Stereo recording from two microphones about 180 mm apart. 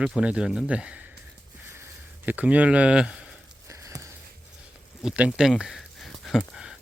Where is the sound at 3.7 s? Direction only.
15° right (ahead or behind).